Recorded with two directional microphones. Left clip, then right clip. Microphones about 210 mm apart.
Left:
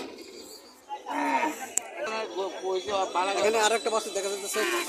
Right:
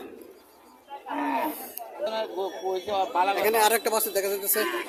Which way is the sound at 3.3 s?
10° right (ahead or behind).